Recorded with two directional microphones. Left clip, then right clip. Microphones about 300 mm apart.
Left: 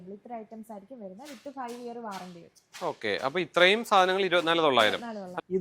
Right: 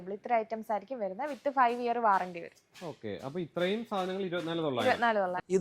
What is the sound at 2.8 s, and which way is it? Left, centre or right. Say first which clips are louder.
Speech: left 10 dB; centre.